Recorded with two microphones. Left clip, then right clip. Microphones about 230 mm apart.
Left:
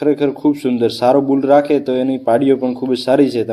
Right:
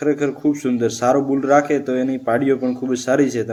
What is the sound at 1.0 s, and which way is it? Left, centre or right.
Speech, centre.